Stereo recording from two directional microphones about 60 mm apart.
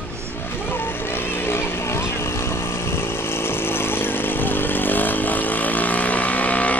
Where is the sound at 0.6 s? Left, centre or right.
Left.